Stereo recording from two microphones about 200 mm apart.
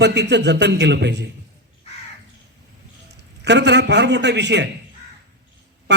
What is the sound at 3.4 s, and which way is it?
A man's voice, 60° right (ahead or behind).